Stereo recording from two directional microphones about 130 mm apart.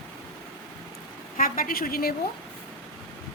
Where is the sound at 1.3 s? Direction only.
90° left.